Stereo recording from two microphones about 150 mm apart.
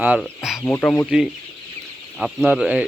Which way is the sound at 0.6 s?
10° left (ahead or behind).